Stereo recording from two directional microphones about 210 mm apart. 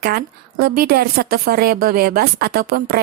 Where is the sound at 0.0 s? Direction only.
45° right (ahead or behind).